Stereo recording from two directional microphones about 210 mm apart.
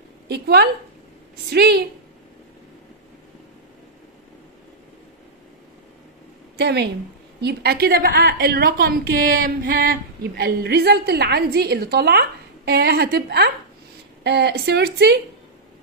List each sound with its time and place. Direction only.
0.3 s a woman's voice: 50° right (ahead or behind)
6.5 s a woman's voice: 50° right (ahead or behind)